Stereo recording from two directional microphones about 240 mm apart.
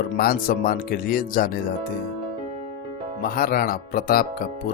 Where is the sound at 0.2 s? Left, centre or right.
Left.